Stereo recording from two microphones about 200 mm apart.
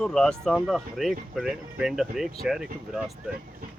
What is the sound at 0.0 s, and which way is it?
Speech, 5° left (ahead or behind).